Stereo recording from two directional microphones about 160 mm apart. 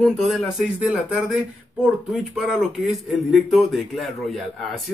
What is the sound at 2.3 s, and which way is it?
Speech, 5° right (ahead or behind).